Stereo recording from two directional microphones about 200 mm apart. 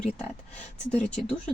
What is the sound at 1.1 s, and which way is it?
Speech, 5° left (ahead or behind).